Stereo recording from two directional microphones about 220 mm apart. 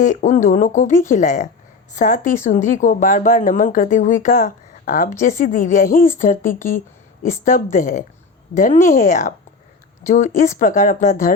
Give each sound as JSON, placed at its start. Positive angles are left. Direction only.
{"t": 0.0, "sound": "speech", "side_deg": 35}